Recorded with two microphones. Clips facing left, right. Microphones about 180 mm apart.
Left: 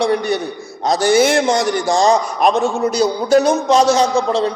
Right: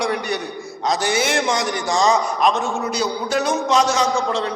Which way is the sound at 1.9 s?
50° left (ahead or behind).